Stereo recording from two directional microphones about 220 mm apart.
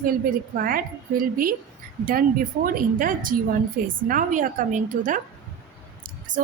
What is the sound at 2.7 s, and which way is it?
A woman's voice, 40° right (ahead or behind).